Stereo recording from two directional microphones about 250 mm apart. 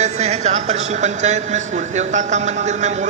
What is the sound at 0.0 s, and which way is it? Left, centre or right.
A man's voice, right.